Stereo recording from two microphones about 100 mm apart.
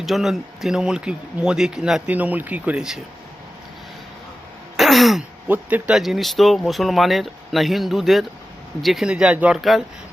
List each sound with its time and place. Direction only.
0.0 s speech: centre (ahead or behind)
2.0 s speech: 15° right (ahead or behind)
4.8 s throat clearing: centre (ahead or behind)
5.5 s speech: 15° right (ahead or behind)
6.0 s speech: centre (ahead or behind)
9.6 s speech: centre (ahead or behind)